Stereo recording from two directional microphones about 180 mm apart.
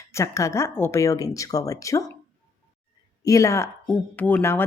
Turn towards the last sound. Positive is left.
turn(degrees=10)  # may be behind; listen again after turning